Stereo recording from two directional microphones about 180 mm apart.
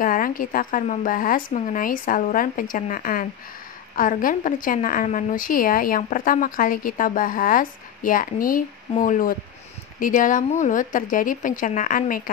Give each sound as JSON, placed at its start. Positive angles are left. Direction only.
{"t": 0.0, "sound": "a woman's voice", "side_deg": 50}